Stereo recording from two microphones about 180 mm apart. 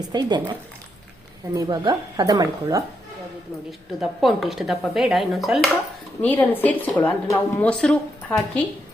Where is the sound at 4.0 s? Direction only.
Centre (ahead or behind).